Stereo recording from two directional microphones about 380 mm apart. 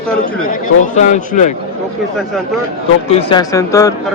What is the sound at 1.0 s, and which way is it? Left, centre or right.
Speech, centre.